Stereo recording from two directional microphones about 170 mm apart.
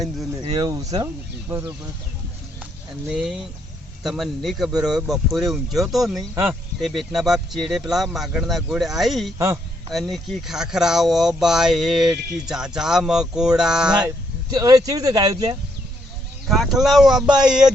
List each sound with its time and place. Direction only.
0.5 s speech: 20° right (ahead or behind)
3.1 s speech: 5° right (ahead or behind)
14.5 s speech: 20° right (ahead or behind)
16.5 s speech: centre (ahead or behind)